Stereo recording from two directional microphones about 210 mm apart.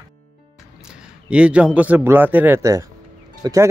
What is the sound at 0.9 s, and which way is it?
A man's voice, 5° right (ahead or behind).